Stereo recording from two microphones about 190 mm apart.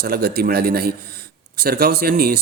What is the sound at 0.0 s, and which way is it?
A man's voice, 55° right (ahead or behind).